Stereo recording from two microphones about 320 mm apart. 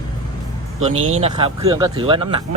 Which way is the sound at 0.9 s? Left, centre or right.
Right.